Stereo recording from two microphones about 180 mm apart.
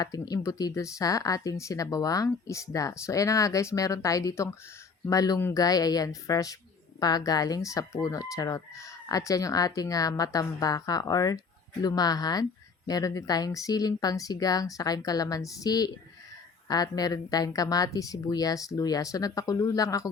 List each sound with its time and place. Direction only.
0.0 s speech: 20° left (ahead or behind)